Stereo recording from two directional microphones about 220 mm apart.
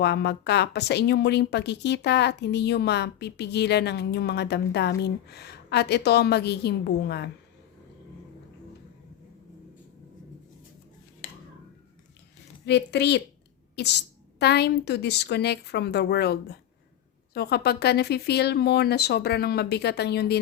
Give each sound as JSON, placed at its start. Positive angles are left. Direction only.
{"t": 0.0, "sound": "a woman's voice", "side_deg": 50}
{"t": 12.6, "sound": "a woman's voice", "side_deg": 50}